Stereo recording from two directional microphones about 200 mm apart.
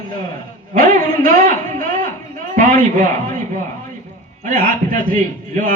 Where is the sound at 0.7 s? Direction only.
45° right (ahead or behind).